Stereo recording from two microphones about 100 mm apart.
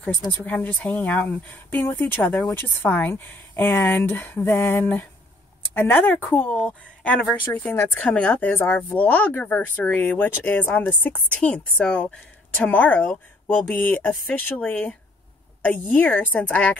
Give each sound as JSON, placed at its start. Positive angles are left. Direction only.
{"t": 0.3, "sound": "speech", "side_deg": 20}